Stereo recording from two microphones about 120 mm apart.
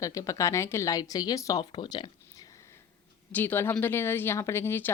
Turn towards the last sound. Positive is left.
turn(degrees=20)  # may be behind; listen again after turning